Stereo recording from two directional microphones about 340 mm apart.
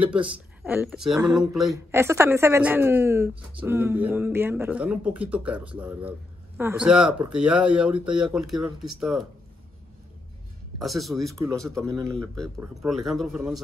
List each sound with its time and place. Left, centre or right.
0.0 s a woman's voice: centre
10.8 s a woman's voice: centre